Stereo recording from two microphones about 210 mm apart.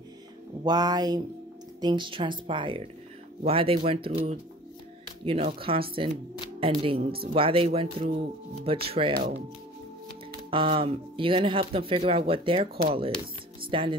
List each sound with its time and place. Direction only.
0.7 s speech: 20° right (ahead or behind)
5.2 s speech: 25° right (ahead or behind)
10.5 s speech: 25° right (ahead or behind)